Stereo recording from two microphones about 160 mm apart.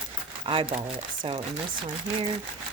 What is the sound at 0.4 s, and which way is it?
Speech, 35° right (ahead or behind).